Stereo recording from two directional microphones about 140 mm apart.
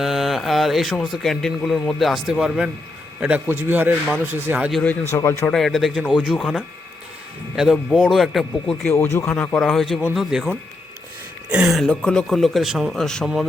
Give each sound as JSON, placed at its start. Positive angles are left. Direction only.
{"t": 0.0, "sound": "a man's voice", "side_deg": 0}
{"t": 4.8, "sound": "speech", "side_deg": 15}
{"t": 5.5, "sound": "speech", "side_deg": 0}
{"t": 8.9, "sound": "speech", "side_deg": 20}
{"t": 11.5, "sound": "speech", "side_deg": -5}